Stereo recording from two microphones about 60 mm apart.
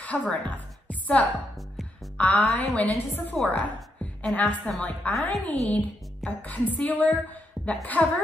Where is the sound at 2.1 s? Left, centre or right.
Left.